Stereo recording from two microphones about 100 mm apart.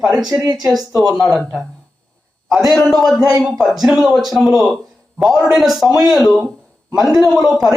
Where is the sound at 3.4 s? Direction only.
5° right (ahead or behind).